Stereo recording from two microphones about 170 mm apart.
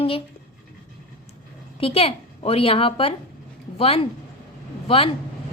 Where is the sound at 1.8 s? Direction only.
35° left (ahead or behind).